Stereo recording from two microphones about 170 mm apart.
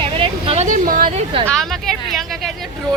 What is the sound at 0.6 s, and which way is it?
Speech, 50° right (ahead or behind).